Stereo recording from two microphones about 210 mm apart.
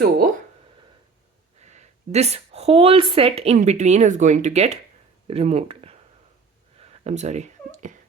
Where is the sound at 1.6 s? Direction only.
35° right (ahead or behind).